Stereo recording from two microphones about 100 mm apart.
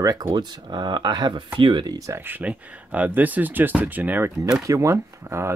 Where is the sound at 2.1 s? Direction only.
20° right (ahead or behind).